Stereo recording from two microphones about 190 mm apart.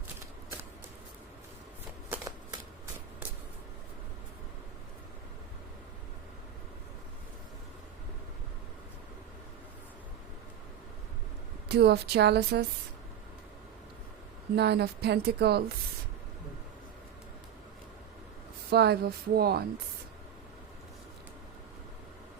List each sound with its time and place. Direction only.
2.0 s shuffling cards: 15° right (ahead or behind)
11.7 s a woman's voice: 60° right (ahead or behind)
14.5 s a woman's voice: 60° right (ahead or behind)
18.7 s a woman's voice: 55° right (ahead or behind)